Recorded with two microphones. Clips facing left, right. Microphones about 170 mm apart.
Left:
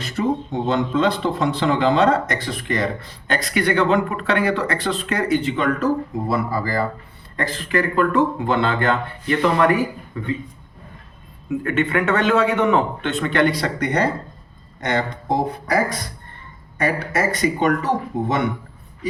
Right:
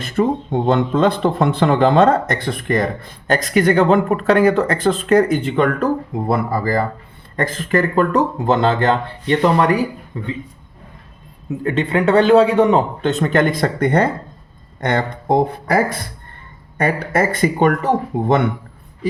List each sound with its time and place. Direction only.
0.0 s a man's voice: 55° right (ahead or behind); by 10.3 s 30° right (ahead or behind)
11.6 s a man's voice: 30° right (ahead or behind); by 18.3 s 55° right (ahead or behind)